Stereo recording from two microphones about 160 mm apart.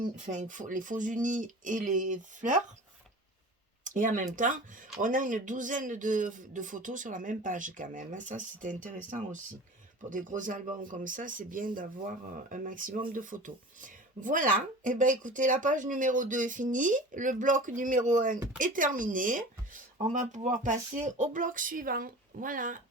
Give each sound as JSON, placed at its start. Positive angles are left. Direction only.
{"t": 0.0, "sound": "speech", "side_deg": -50}
{"t": 3.8, "sound": "speech", "side_deg": -55}